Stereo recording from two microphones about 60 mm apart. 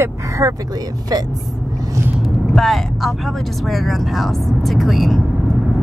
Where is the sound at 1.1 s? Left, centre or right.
Right.